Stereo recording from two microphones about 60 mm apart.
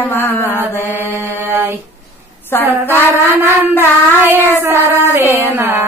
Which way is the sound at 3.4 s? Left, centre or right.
Right.